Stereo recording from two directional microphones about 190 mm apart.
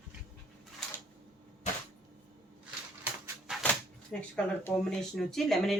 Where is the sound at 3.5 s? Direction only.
5° right (ahead or behind).